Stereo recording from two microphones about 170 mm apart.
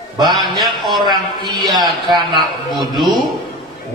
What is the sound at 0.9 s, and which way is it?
A man's voice, 25° right (ahead or behind).